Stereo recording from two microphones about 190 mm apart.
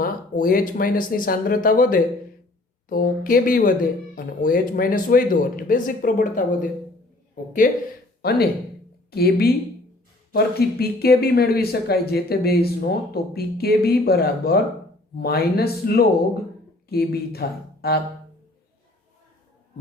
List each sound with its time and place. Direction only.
0.0 s speech: 50° left (ahead or behind)